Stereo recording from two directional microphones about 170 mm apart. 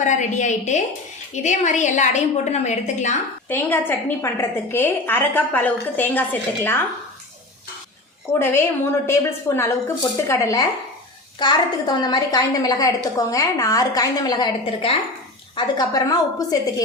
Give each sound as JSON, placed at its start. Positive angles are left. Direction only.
{"t": 0.0, "sound": "a woman's voice", "side_deg": 45}
{"t": 3.5, "sound": "a woman's voice", "side_deg": 10}
{"t": 8.3, "sound": "a woman's voice", "side_deg": 15}
{"t": 15.5, "sound": "a woman's voice", "side_deg": 20}